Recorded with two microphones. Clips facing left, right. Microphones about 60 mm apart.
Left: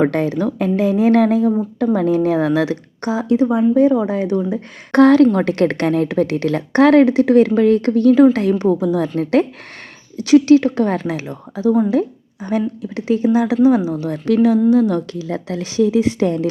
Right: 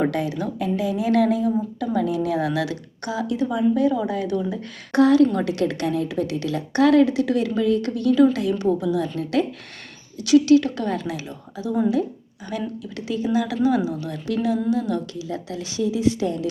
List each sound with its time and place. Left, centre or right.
0.1 s a woman's voice: left
4.9 s a woman's voice: left
14.3 s a woman's voice: left